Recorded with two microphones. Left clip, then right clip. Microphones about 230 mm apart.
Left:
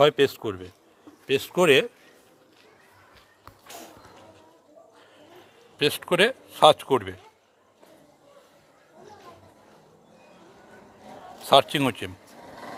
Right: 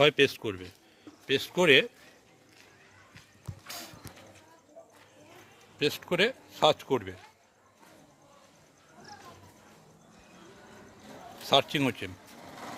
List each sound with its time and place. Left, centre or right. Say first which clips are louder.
0.0 s speech: left 4 dB; centre
1.3 s speech: left 3 dB; centre
5.8 s speech: left 6 dB; centre
11.4 s speech: left 6 dB; centre